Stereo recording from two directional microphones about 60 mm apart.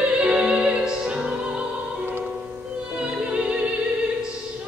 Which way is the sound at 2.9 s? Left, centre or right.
Centre.